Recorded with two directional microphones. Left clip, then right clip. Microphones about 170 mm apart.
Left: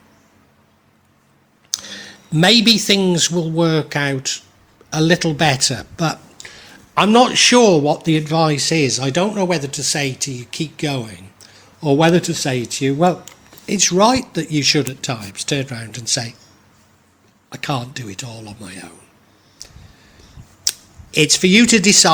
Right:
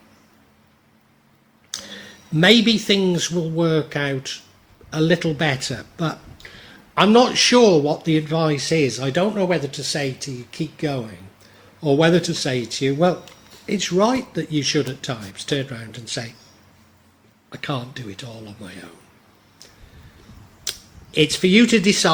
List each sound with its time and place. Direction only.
1.7 s speech: 50° left (ahead or behind)
17.5 s speech: 50° left (ahead or behind)
19.6 s a sound: 45° left (ahead or behind)
20.7 s speech: 45° left (ahead or behind)